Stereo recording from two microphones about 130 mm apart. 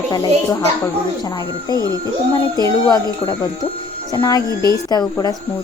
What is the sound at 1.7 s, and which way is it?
Speech, 30° right (ahead or behind).